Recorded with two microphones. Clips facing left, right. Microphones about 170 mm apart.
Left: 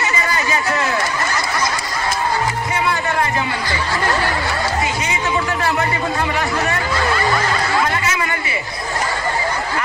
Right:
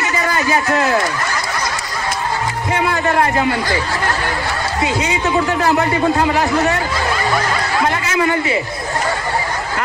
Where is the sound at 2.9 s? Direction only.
60° right (ahead or behind).